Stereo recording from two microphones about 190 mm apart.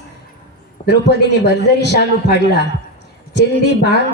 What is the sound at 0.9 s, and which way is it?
A man's voice, 65° left (ahead or behind).